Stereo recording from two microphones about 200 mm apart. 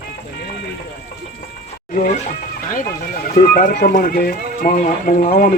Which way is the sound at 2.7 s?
40° left (ahead or behind).